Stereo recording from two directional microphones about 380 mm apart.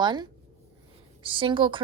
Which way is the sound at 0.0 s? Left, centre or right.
Centre.